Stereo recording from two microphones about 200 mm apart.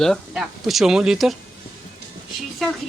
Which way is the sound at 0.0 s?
Centre (ahead or behind).